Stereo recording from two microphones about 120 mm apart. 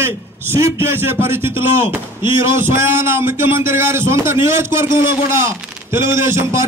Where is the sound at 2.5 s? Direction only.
20° right (ahead or behind).